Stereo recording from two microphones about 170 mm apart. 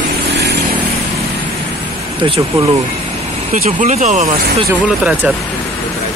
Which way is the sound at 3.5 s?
45° right (ahead or behind).